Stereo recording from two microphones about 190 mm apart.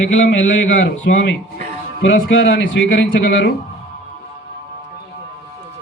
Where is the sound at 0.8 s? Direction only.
70° left (ahead or behind).